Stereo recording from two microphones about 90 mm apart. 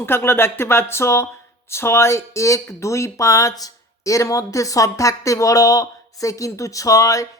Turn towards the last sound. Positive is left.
turn(degrees=40)  # may be behind; listen again after turning